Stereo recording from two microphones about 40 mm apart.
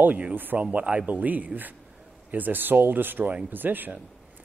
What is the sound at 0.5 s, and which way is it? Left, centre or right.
Speech, right.